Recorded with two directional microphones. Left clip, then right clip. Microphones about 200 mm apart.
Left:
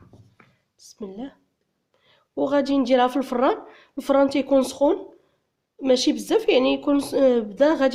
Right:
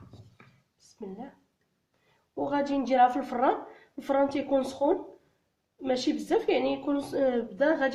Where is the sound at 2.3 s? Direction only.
50° left (ahead or behind).